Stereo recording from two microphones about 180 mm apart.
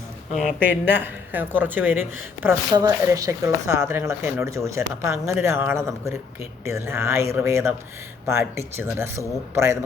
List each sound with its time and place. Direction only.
0.9 s speech: 10° right (ahead or behind)